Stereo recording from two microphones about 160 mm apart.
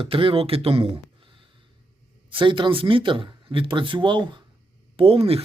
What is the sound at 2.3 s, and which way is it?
Speech, 30° right (ahead or behind).